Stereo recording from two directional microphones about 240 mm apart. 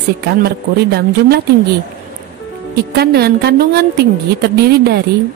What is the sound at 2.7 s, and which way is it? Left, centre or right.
A woman's voice, right.